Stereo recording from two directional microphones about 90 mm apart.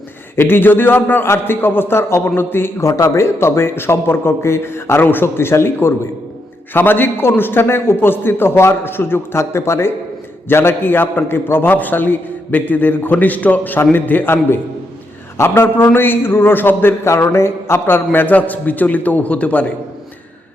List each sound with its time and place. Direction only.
0.3 s a man's voice: 25° left (ahead or behind)